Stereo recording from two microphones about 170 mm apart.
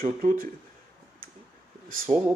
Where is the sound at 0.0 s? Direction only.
55° right (ahead or behind).